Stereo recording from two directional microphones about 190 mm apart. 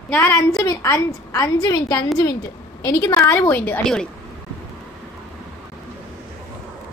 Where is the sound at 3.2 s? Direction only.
10° left (ahead or behind).